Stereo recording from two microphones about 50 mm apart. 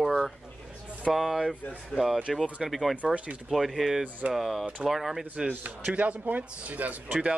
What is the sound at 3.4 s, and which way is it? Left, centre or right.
Speech, centre.